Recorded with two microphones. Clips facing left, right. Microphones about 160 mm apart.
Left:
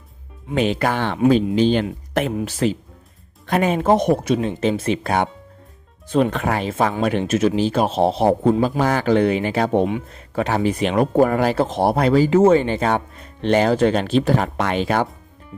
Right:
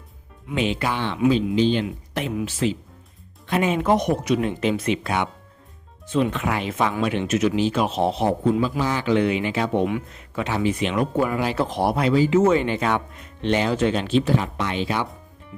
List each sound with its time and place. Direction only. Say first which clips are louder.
0.4 s speech: left 4 dB; 45° left (ahead or behind)
3.8 s a man's voice: left 4 dB; 30° left (ahead or behind); by 11.5 s 45° left (ahead or behind)
11.5 s speech: left 4 dB; 25° left (ahead or behind)
11.9 s a man's voice: left 3 dB; 40° left (ahead or behind)
12.4 s speech: left 4 dB; 30° left (ahead or behind); by 15.0 s 50° left (ahead or behind)